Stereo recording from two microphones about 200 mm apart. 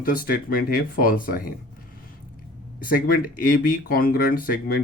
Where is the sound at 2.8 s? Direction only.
45° left (ahead or behind).